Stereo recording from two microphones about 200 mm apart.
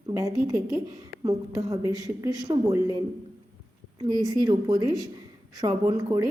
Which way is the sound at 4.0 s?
20° right (ahead or behind).